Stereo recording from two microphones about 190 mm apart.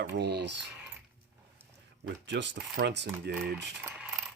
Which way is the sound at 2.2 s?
70° right (ahead or behind).